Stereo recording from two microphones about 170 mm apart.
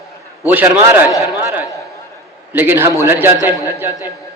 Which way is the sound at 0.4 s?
10° right (ahead or behind).